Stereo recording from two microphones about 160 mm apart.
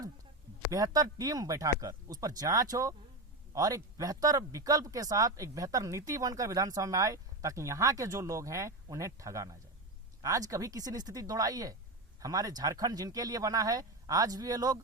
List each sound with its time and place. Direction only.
0.7 s speech: 25° right (ahead or behind)